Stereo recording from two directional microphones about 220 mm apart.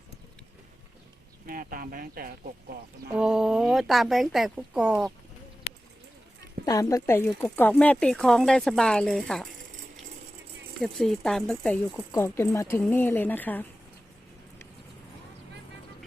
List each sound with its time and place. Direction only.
1.5 s speech: 40° right (ahead or behind)
3.2 s speech: 5° right (ahead or behind)
6.7 s speech: 15° left (ahead or behind)
10.8 s speech: centre (ahead or behind)